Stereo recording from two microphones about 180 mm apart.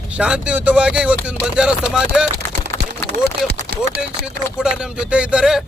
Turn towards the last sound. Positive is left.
turn(degrees=-5)  # may be behind; listen again after turning